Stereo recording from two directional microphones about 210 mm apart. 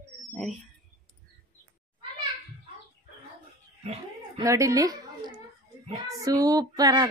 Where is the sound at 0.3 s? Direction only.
Centre (ahead or behind).